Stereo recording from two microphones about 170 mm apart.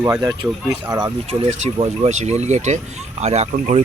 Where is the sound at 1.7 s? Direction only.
40° right (ahead or behind).